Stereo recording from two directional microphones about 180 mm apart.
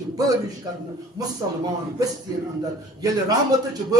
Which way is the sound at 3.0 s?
20° right (ahead or behind).